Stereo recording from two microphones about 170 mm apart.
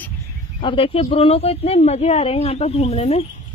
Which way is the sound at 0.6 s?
30° left (ahead or behind).